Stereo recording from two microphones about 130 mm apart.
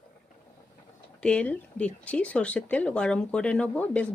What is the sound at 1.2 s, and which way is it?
Speech, 10° left (ahead or behind).